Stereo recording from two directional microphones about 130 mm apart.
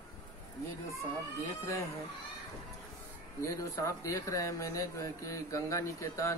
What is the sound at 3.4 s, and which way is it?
Speech, 25° left (ahead or behind).